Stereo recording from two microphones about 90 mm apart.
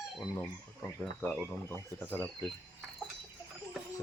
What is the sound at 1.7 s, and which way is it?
Speech, 20° left (ahead or behind).